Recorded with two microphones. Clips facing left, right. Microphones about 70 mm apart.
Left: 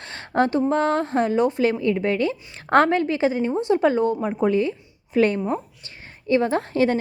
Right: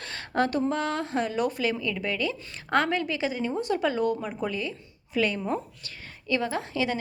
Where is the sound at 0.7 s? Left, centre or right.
Left.